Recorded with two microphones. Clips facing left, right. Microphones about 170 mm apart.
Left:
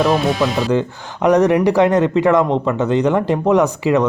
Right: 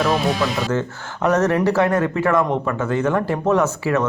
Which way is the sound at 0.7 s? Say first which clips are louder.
Left 5 dB; 15° left (ahead or behind).